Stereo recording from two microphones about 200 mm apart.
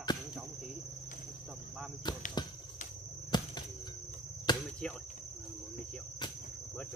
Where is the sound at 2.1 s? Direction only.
20° left (ahead or behind).